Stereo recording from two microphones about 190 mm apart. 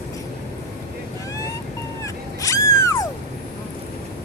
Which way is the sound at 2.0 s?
15° left (ahead or behind).